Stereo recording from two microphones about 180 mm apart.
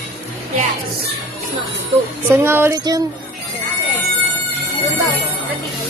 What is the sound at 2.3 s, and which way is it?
Music, 15° right (ahead or behind).